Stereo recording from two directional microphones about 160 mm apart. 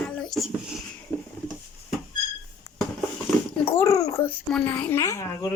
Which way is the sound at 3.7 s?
20° left (ahead or behind).